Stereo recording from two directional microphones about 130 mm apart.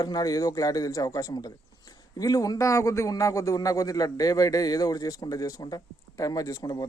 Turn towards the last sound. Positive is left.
turn(degrees=25)  # may be behind; listen again after turning